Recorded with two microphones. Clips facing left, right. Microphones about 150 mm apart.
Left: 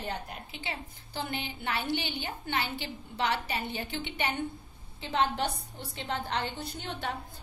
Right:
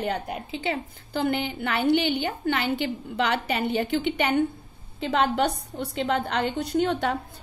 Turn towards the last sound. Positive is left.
turn(degrees=-90)